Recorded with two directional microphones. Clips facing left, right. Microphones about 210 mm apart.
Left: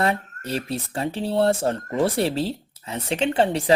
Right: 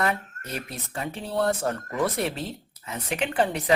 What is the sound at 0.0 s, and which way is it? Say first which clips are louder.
Speech: left 4 dB; 30° left (ahead or behind).